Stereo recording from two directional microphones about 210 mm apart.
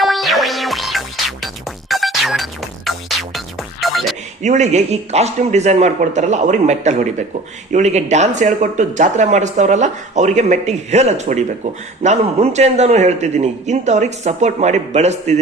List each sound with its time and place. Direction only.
0.0 s music: centre (ahead or behind)
4.4 s speech: 35° right (ahead or behind)